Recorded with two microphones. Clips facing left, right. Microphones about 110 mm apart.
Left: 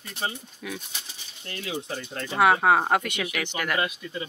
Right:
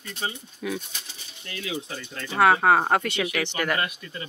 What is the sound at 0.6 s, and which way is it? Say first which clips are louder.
Speech: right 6 dB; 5° right (ahead or behind).